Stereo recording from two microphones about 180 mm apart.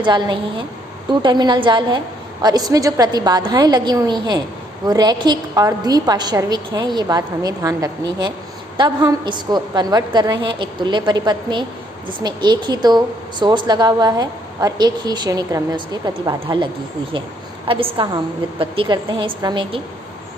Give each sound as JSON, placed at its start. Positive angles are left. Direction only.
{"t": 0.0, "sound": "a woman's voice", "side_deg": -25}
{"t": 17.7, "sound": "a woman's voice", "side_deg": -30}